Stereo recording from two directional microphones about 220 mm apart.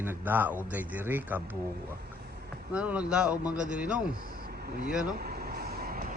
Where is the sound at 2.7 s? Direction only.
5° right (ahead or behind).